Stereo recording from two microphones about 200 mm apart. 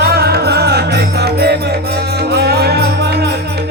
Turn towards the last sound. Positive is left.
turn(degrees=-55)  # may be behind; listen again after turning